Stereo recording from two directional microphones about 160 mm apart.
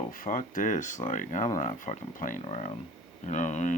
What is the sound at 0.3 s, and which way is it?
Speech, 55° left (ahead or behind).